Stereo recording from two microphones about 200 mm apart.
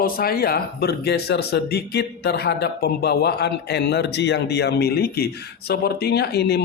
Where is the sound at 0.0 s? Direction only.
50° left (ahead or behind).